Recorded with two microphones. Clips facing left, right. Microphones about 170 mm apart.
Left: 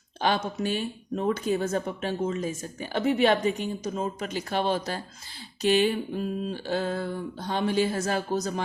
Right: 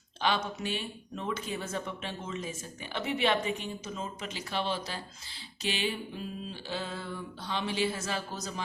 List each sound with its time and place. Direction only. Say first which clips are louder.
0.2 s speech: left 5 dB; 45° left (ahead or behind)